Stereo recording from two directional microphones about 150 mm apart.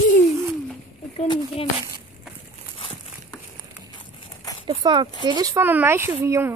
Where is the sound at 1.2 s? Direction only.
35° left (ahead or behind).